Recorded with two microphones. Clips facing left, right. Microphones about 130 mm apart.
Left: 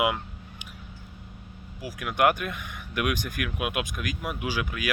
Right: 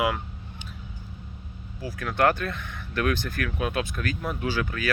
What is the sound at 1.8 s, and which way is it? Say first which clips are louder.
Speech: even; 15° left (ahead or behind).